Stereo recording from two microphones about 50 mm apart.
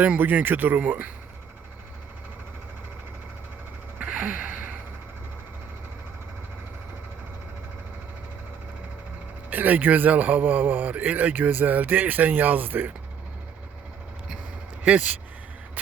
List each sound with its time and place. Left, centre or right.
0.0 s a man's voice: right
4.0 s gasp: right
9.5 s a man's voice: right
14.8 s speech: right